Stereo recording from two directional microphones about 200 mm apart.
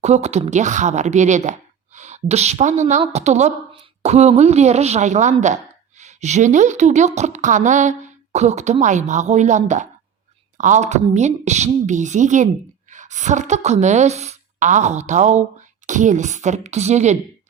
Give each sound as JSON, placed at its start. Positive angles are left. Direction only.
{"t": 0.0, "sound": "a woman's voice", "side_deg": -35}